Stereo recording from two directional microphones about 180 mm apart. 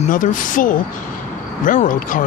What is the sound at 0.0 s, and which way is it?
Speech, 45° left (ahead or behind).